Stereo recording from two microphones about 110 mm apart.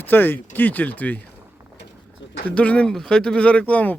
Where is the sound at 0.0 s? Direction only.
20° left (ahead or behind).